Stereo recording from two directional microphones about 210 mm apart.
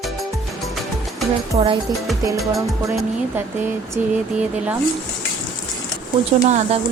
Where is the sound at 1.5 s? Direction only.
30° right (ahead or behind).